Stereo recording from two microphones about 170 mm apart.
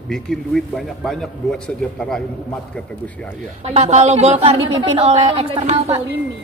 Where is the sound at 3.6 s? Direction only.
40° right (ahead or behind).